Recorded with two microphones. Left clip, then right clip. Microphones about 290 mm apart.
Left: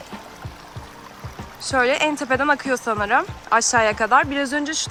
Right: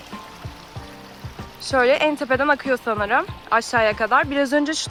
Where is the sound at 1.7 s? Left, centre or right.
Centre.